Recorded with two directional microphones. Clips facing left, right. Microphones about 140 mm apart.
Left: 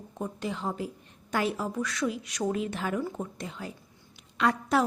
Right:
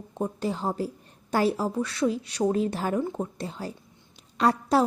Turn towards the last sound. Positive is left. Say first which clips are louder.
# right 3 dB
turn(degrees=-35)  # may be behind; listen again after turning